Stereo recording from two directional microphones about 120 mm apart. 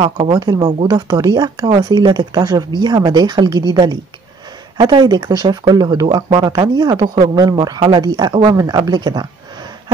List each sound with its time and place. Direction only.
0.0 s speech: 40° right (ahead or behind)